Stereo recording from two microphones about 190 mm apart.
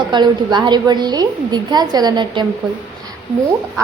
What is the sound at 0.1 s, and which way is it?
A woman's voice, 25° right (ahead or behind).